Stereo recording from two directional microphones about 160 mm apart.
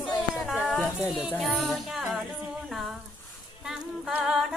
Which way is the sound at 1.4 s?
Centre (ahead or behind).